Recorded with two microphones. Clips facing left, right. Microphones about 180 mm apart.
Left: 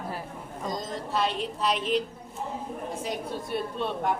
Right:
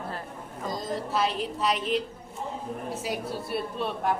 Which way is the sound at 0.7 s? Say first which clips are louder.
Right 2 dB; centre (ahead or behind).